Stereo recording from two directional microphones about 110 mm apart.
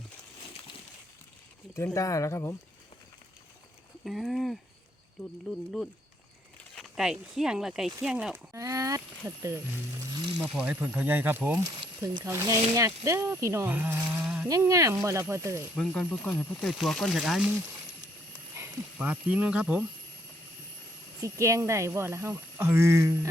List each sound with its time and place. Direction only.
1.7 s speech: 25° left (ahead or behind)
4.0 s speech: centre (ahead or behind)
6.9 s speech: 5° right (ahead or behind)
8.5 s speech: 30° right (ahead or behind)
10.3 s speech: 5° right (ahead or behind)
10.6 s speech: 15° right (ahead or behind)
16.0 s speech: 15° left (ahead or behind); by 17.5 s 5° right (ahead or behind)
18.9 s speech: 10° right (ahead or behind)
21.2 s speech: 25° right (ahead or behind)